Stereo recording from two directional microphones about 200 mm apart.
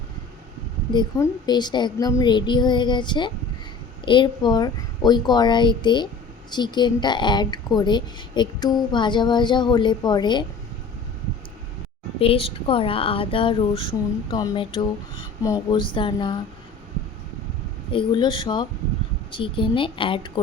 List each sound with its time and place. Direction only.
0.9 s speech: 20° left (ahead or behind)
12.2 s speech: 30° left (ahead or behind)
17.9 s speech: 25° left (ahead or behind)